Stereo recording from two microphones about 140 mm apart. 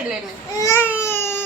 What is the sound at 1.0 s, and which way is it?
Baby cry, 15° left (ahead or behind).